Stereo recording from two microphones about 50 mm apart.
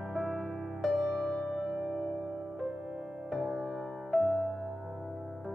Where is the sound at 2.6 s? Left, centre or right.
Centre.